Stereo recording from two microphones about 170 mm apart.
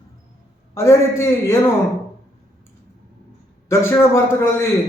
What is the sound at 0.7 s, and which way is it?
Speech, 15° left (ahead or behind).